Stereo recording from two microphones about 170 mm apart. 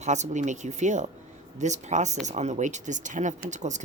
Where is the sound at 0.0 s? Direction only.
45° right (ahead or behind).